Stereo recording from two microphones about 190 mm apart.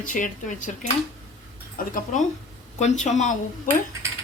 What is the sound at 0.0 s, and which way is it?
Speech, 45° left (ahead or behind).